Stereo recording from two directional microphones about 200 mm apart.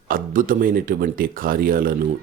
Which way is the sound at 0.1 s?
45° right (ahead or behind).